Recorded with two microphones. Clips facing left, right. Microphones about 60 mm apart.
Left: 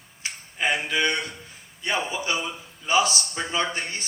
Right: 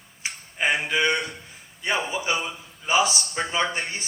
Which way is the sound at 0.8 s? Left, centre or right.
Centre.